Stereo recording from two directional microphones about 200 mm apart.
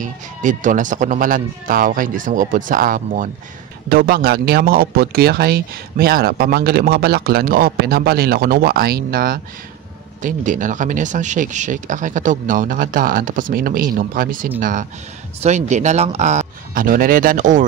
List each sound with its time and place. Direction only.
0.0 s speech: 40° right (ahead or behind)